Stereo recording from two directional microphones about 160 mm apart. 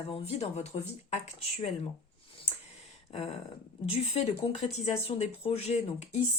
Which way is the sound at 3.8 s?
35° left (ahead or behind).